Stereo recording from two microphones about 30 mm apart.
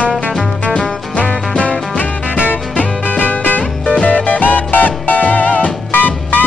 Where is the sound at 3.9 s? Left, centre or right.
Left.